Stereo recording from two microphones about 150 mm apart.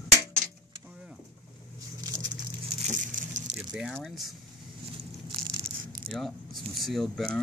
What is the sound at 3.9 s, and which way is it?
Speech, centre (ahead or behind).